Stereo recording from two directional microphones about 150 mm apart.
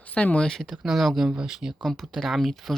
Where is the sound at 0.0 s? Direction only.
10° left (ahead or behind).